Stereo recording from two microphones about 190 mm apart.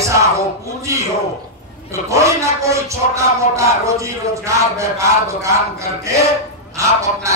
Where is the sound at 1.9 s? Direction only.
15° right (ahead or behind).